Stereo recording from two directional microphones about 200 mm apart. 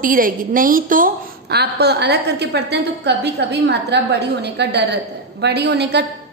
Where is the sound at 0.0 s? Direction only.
45° right (ahead or behind).